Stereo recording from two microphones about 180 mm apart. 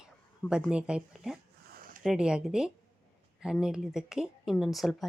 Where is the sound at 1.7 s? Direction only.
50° right (ahead or behind).